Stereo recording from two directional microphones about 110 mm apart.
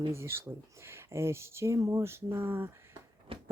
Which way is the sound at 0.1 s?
25° right (ahead or behind).